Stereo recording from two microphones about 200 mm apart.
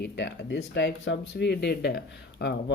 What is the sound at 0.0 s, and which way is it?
Speech, 60° left (ahead or behind).